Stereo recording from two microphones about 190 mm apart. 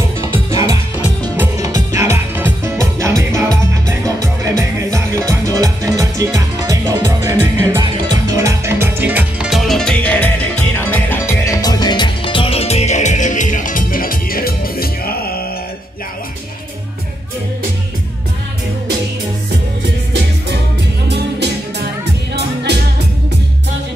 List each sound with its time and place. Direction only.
0.3 s music: 20° right (ahead or behind); by 15.1 s 50° left (ahead or behind)
21.1 s music: 60° right (ahead or behind)